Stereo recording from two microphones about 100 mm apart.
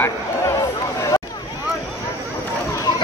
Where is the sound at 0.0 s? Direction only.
30° left (ahead or behind).